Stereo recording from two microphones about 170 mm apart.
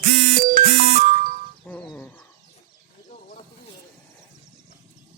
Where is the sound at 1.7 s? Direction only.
5° left (ahead or behind).